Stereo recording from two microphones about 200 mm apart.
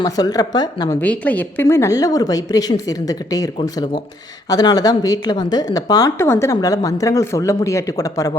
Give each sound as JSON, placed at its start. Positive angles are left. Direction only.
{"t": 0.0, "sound": "speech", "side_deg": 20}
{"t": 1.0, "sound": "speech", "side_deg": 5}